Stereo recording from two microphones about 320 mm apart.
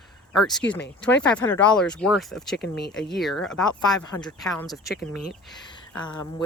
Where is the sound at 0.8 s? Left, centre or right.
Left.